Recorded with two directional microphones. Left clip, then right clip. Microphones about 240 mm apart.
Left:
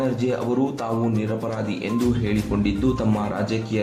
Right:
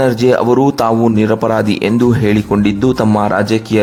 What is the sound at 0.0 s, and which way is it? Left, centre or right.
Speech, right.